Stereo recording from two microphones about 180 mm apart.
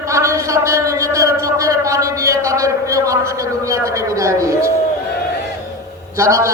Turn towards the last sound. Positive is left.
turn(degrees=-15)  # may be behind; listen again after turning